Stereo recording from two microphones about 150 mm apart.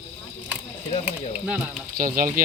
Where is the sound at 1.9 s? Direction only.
65° right (ahead or behind).